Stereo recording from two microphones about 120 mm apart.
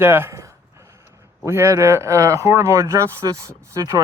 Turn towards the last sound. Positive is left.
turn(degrees=-25)  # may be behind; listen again after turning